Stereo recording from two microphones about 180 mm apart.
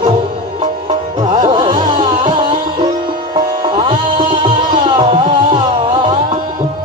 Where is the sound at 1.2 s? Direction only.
30° right (ahead or behind).